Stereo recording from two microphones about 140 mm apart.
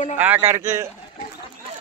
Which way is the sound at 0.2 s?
15° right (ahead or behind).